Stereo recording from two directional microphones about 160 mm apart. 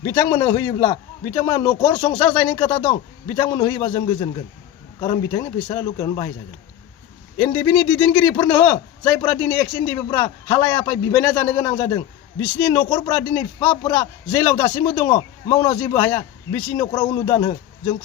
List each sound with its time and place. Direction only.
0.0 s a man's voice: 20° left (ahead or behind)
2.7 s a man's voice: 35° left (ahead or behind)
3.3 s a man's voice: 20° left (ahead or behind)
7.3 s a man's voice: 20° left (ahead or behind)